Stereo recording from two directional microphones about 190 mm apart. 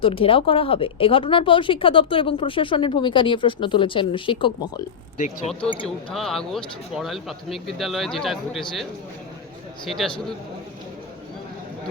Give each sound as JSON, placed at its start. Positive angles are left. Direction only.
{"t": 0.0, "sound": "speech", "side_deg": 30}
{"t": 5.7, "sound": "speech", "side_deg": 25}
{"t": 6.1, "sound": "speech", "side_deg": 0}